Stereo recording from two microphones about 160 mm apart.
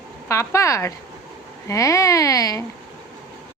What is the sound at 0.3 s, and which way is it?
Speech, 20° left (ahead or behind).